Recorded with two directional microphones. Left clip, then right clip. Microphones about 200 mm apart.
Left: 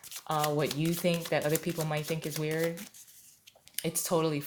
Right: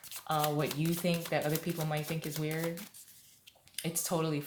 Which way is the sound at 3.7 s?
35° left (ahead or behind).